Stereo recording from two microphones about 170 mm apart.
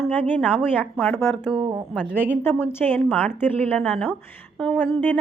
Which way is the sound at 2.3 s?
10° left (ahead or behind).